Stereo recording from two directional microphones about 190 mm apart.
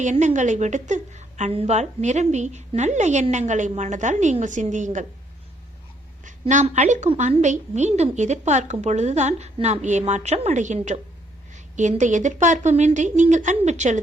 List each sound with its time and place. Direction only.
0.0 s a woman's voice: 40° right (ahead or behind)
6.2 s a woman's voice: 40° right (ahead or behind)